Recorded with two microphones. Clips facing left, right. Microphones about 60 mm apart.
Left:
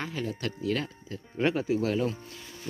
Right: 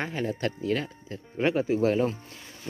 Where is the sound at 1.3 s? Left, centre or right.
Centre.